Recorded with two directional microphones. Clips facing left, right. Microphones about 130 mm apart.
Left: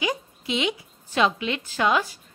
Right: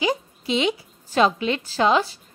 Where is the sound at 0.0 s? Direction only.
30° right (ahead or behind).